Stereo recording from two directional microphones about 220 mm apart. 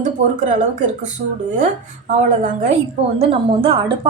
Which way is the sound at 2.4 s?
35° right (ahead or behind).